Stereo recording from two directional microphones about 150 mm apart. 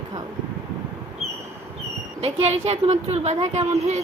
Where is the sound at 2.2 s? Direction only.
45° right (ahead or behind).